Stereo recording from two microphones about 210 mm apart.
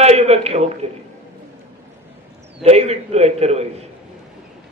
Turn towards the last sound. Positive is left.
turn(degrees=-30)  # may be behind; listen again after turning